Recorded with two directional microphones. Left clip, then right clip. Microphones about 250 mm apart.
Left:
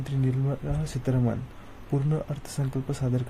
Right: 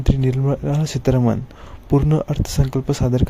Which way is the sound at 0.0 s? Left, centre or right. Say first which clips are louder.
Right 10 dB; right.